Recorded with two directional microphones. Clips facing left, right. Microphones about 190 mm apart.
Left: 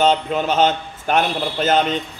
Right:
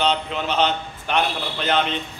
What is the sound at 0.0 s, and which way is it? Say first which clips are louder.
A man's voice: left 5 dB; 45° left (ahead or behind).